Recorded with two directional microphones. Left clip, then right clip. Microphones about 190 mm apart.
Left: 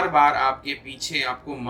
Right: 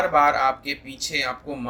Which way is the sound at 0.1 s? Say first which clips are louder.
Left 2 dB; 50° right (ahead or behind).